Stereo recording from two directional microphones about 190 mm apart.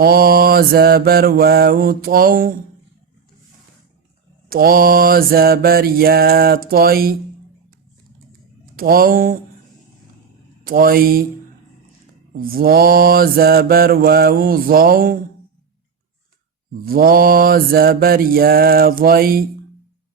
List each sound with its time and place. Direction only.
0.0 s mantra: 55° right (ahead or behind)
4.4 s mantra: 50° right (ahead or behind)
8.7 s mantra: 50° right (ahead or behind)
10.6 s mantra: 50° right (ahead or behind)
12.3 s mantra: 50° right (ahead or behind)
16.8 s mantra: 50° right (ahead or behind)